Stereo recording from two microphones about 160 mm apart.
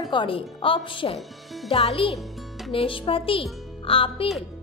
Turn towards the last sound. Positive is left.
turn(degrees=35)  # may be behind; listen again after turning